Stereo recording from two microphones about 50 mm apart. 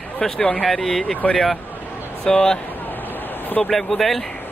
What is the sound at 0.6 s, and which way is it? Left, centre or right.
Speech, centre.